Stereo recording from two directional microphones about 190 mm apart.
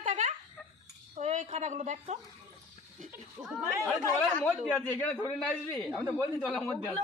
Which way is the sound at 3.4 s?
10° right (ahead or behind).